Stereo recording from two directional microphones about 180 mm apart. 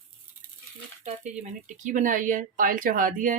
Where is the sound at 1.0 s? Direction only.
40° right (ahead or behind).